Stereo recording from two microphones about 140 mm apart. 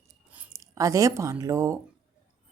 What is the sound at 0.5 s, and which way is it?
Speech, 25° right (ahead or behind).